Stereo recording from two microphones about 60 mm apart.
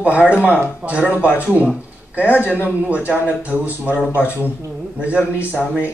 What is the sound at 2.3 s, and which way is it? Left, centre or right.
Speech, left.